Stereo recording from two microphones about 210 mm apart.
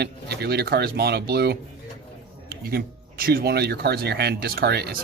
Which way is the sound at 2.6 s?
45° right (ahead or behind).